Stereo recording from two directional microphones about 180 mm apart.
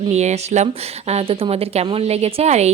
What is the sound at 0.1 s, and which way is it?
A woman's voice, 40° right (ahead or behind).